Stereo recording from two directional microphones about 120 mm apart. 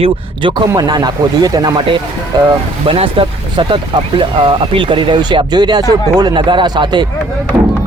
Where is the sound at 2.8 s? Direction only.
50° right (ahead or behind).